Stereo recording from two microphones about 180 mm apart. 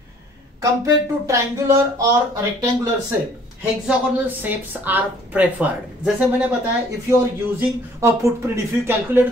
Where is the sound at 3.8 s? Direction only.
10° right (ahead or behind).